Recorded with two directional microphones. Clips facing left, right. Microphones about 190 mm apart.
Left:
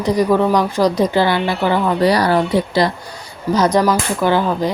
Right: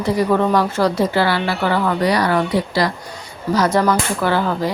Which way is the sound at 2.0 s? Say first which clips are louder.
Left 4 dB; 35° left (ahead or behind).